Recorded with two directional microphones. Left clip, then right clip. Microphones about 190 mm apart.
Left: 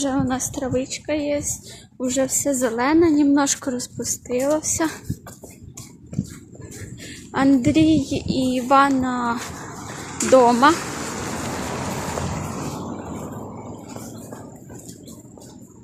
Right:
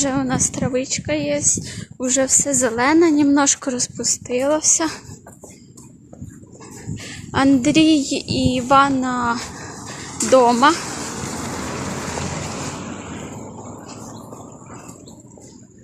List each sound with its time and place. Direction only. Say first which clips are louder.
0.0 s a woman's voice: right 2 dB; 5° right (ahead or behind)
6.9 s a woman's voice: right 4 dB; centre (ahead or behind)
11.1 s vehicle: even; 45° right (ahead or behind); by 12.1 s 65° right (ahead or behind)